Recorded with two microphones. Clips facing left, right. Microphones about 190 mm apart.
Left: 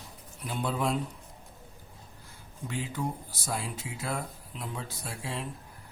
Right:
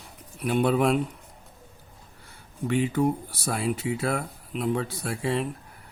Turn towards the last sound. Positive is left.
turn(degrees=-65)  # may be behind; listen again after turning